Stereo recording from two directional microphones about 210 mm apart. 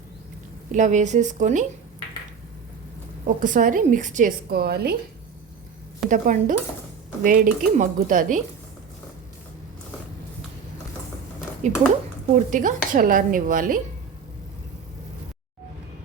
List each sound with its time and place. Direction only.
0.7 s a woman's voice: 35° right (ahead or behind)
3.2 s a woman's voice: 40° right (ahead or behind)
6.1 s a woman's voice: 40° right (ahead or behind)
11.6 s a woman's voice: 35° right (ahead or behind)